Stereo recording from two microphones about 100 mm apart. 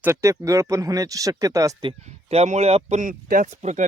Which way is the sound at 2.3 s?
90° right.